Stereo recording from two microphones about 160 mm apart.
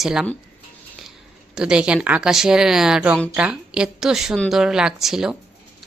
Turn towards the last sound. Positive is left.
turn(degrees=-5)  # may be behind; listen again after turning